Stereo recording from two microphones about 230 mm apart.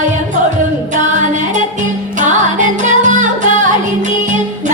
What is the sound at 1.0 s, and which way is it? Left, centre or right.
Music, right.